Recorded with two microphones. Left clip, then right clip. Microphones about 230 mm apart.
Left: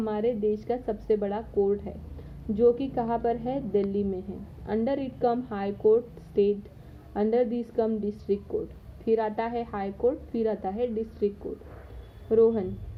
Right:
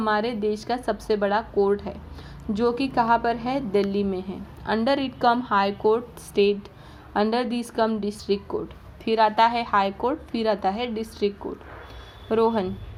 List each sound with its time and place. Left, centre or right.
0.0 s a woman's voice: right
12.3 s a woman's voice: right